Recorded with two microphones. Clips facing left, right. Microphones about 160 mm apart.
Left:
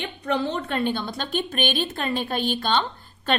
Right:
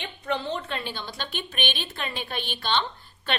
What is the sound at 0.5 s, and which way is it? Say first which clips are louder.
A woman's voice: left 7 dB; 50° left (ahead or behind).